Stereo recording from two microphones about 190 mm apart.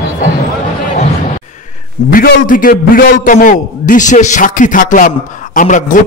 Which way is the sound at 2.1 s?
45° left (ahead or behind).